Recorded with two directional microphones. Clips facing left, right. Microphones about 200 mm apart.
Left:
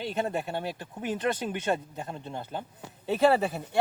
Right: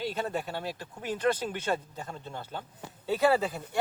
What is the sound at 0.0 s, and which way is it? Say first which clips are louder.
Speech: left 2 dB; 20° left (ahead or behind).